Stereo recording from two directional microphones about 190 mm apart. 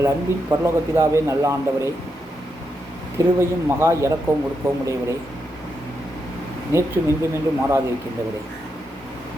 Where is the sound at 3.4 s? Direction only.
15° right (ahead or behind).